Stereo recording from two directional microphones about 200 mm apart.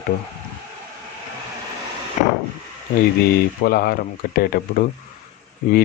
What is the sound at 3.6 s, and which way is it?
Speech, 50° left (ahead or behind).